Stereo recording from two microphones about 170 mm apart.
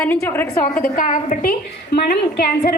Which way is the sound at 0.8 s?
55° left (ahead or behind).